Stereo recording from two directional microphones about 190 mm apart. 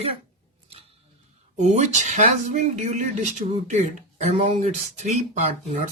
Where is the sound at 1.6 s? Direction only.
40° right (ahead or behind).